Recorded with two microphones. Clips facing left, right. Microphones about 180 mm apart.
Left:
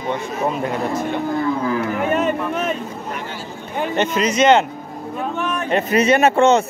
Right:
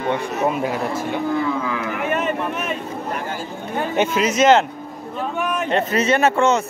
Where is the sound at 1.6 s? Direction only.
40° left (ahead or behind).